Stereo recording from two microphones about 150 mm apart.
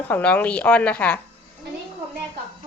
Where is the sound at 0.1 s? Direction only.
10° left (ahead or behind).